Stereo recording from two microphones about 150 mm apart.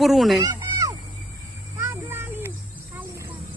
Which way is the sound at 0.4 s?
25° right (ahead or behind).